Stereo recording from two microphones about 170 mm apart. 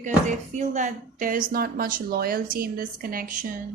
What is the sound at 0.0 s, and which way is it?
Speech, 45° right (ahead or behind).